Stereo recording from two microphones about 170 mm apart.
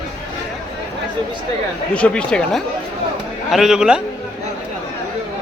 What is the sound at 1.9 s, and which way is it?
Speech, 5° left (ahead or behind).